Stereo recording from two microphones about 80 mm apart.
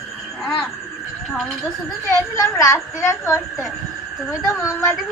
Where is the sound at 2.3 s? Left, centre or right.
Left.